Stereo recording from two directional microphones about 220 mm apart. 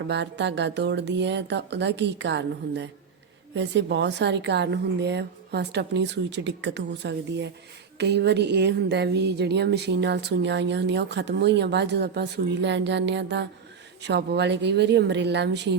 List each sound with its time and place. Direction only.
0.1 s speech: 50° right (ahead or behind)